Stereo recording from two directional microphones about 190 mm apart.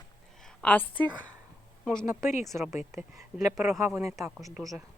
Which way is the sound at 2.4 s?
Centre (ahead or behind).